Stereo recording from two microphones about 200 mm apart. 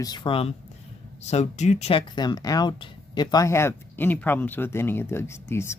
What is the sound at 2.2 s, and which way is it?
Speech, 20° left (ahead or behind).